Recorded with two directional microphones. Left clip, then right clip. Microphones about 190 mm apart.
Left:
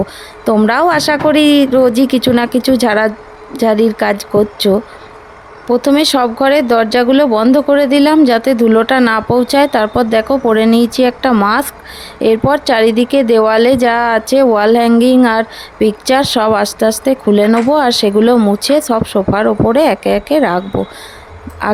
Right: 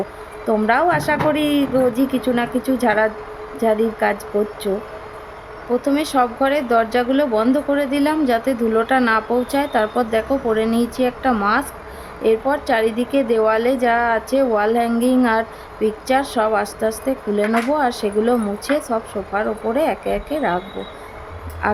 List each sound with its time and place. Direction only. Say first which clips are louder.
0.4 s a woman's voice: left 6 dB; 60° left (ahead or behind)
5.8 s speech: left 7 dB; 50° left (ahead or behind)
21.6 s a sound: left 5 dB; 50° left (ahead or behind)